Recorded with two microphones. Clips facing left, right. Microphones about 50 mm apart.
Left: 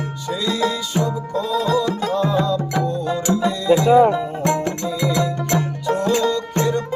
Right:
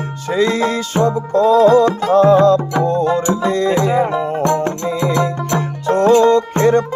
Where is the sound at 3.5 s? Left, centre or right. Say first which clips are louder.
Even; right.